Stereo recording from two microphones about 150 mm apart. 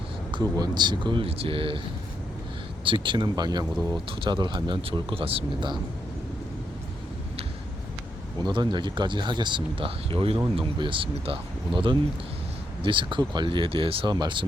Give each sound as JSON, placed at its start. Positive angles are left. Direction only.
{"t": 0.3, "sound": "speech", "side_deg": -30}
{"t": 2.8, "sound": "speech", "side_deg": -35}
{"t": 8.4, "sound": "speech", "side_deg": -30}